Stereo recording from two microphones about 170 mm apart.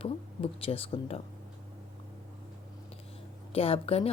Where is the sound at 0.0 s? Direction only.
35° left (ahead or behind).